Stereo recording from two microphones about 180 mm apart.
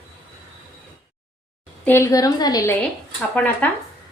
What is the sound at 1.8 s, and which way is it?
Speech, 15° left (ahead or behind).